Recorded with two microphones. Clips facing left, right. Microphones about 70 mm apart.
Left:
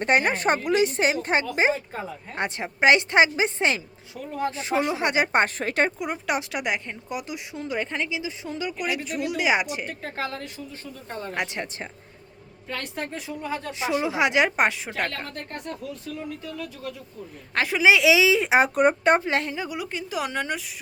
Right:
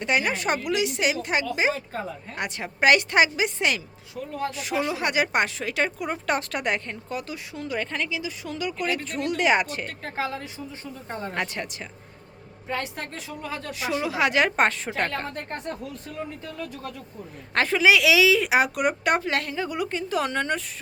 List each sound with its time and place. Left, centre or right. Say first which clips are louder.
0.0 s a woman's voice: left 3 dB; left
5.5 s a woman's voice: left 3 dB; left
6.0 s speech: right 1 dB; centre
10.0 s a woman's voice: right 1 dB; centre
10.7 s speech: right 2 dB; right
11.3 s a woman's voice: left 1 dB; left
12.7 s speech: right 4 dB; right
13.4 s a woman's voice: left 2 dB; centre
15.3 s speech: right 2 dB; right
17.5 s a woman's voice: right 2 dB; centre
17.7 s a woman's voice: left 1 dB; left
19.5 s speech: right 3 dB; centre